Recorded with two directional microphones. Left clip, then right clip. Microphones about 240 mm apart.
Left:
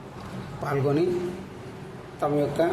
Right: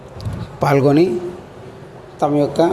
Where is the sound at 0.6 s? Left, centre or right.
Right.